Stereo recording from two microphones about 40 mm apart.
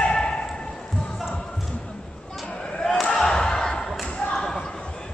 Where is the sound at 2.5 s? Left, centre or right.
Left; by 4.1 s centre.